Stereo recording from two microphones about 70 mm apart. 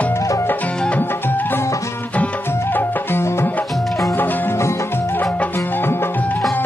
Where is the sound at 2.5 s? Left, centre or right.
Left.